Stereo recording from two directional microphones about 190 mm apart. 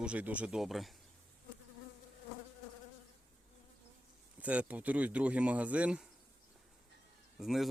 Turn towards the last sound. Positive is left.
turn(degrees=0)  # may be behind; listen again after turning